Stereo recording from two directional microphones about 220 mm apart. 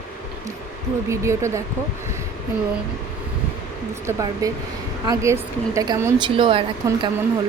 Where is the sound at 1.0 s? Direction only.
15° right (ahead or behind).